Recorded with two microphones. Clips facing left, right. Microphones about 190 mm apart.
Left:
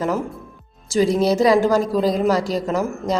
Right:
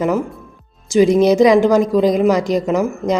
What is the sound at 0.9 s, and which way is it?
A woman's voice, 20° right (ahead or behind).